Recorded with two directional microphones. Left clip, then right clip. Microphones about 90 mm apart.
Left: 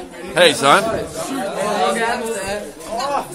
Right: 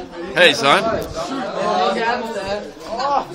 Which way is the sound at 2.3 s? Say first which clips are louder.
Even; 40° left (ahead or behind).